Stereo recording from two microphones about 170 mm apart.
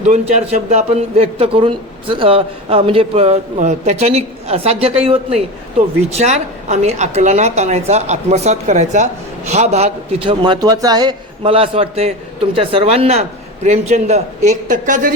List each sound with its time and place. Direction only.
0.0 s a man's voice: 45° right (ahead or behind)